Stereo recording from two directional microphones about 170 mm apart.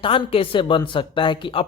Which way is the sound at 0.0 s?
30° left (ahead or behind).